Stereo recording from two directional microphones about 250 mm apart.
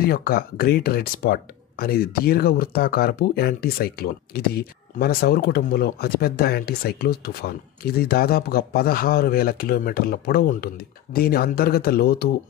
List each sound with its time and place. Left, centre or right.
0.0 s speech: left